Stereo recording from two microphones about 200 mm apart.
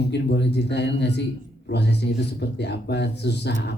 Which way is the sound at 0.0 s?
55° left (ahead or behind).